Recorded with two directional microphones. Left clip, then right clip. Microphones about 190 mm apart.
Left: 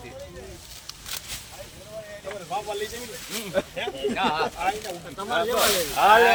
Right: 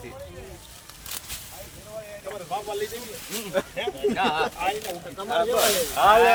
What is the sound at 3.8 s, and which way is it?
Speech, 20° right (ahead or behind).